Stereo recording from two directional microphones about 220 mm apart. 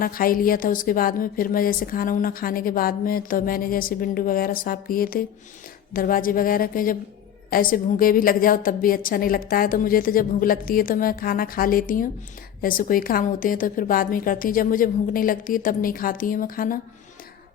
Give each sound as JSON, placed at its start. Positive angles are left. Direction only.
{"t": 0.0, "sound": "a woman's voice", "side_deg": 40}